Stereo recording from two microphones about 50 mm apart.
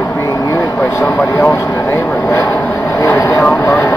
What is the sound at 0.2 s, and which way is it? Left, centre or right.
Vehicle, left.